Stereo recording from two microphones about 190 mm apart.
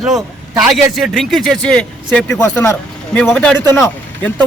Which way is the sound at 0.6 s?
Centre (ahead or behind).